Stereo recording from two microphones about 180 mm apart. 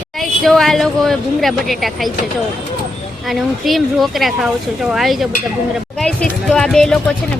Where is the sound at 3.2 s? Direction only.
Centre (ahead or behind).